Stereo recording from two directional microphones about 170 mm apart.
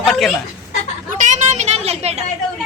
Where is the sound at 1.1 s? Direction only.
45° right (ahead or behind).